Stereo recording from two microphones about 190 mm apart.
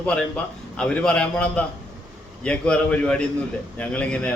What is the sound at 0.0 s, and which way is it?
A man's voice, 5° left (ahead or behind).